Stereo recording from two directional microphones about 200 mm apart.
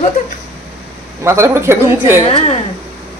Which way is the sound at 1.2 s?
15° right (ahead or behind).